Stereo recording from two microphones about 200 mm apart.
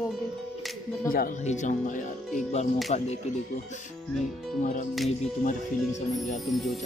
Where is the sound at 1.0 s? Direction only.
45° left (ahead or behind).